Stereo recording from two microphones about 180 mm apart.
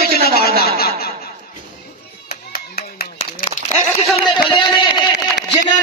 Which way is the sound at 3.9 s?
30° left (ahead or behind).